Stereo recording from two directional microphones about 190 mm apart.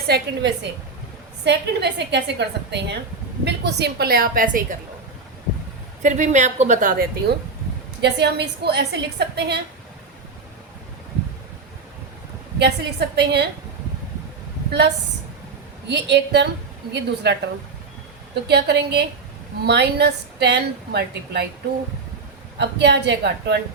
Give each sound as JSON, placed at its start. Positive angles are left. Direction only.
{"t": 0.1, "sound": "a woman's voice", "side_deg": -65}
{"t": 6.0, "sound": "a woman's voice", "side_deg": -40}
{"t": 8.0, "sound": "a woman's voice", "side_deg": -60}
{"t": 12.5, "sound": "a woman's voice", "side_deg": -60}
{"t": 14.7, "sound": "a woman's voice", "side_deg": -65}
{"t": 22.5, "sound": "a woman's voice", "side_deg": -65}